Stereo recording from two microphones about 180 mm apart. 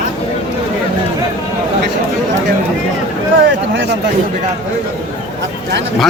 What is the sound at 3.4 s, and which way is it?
Speech, 85° right.